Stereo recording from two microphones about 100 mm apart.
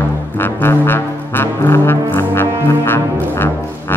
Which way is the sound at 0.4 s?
20° left (ahead or behind).